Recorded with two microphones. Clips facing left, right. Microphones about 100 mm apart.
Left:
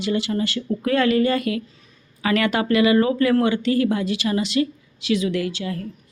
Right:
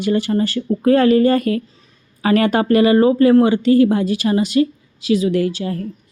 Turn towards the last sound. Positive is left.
turn(degrees=-35)  # may be behind; listen again after turning